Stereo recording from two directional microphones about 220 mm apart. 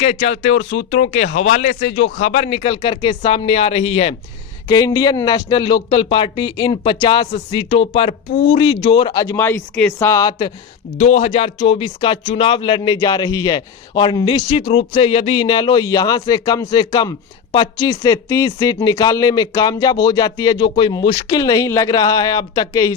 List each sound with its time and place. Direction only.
0.0 s speech: 30° left (ahead or behind)
10.9 s speech: 30° left (ahead or behind)